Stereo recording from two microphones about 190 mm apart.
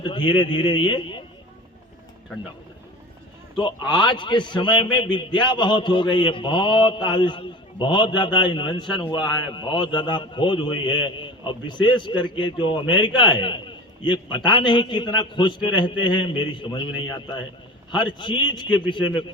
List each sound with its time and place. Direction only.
0.0 s a man's voice: 25° left (ahead or behind)
3.6 s a man's voice: 25° left (ahead or behind)